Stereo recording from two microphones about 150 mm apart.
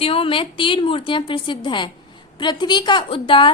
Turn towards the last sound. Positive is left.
turn(degrees=35)  # may be behind; listen again after turning